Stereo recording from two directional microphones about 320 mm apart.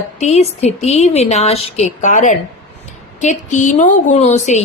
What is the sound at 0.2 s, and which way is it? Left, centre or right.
A woman's voice, centre.